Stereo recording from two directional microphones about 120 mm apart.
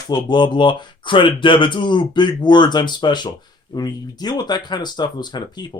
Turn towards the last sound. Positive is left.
turn(degrees=35)  # may be behind; listen again after turning